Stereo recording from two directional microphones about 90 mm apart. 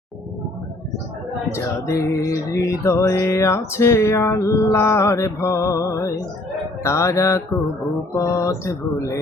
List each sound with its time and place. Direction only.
1.5 s music: 30° left (ahead or behind)